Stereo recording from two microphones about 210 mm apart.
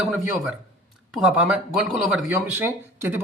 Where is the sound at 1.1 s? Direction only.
Centre (ahead or behind).